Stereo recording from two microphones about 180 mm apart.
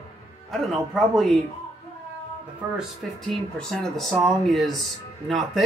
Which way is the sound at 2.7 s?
Centre (ahead or behind).